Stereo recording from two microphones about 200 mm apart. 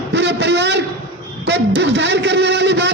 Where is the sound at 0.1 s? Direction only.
60° right (ahead or behind).